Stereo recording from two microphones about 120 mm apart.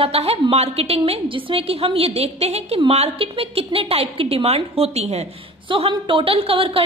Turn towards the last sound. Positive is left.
turn(degrees=-50)  # may be behind; listen again after turning